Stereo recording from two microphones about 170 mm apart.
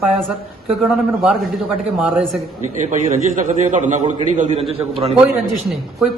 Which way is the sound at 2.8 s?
45° right (ahead or behind).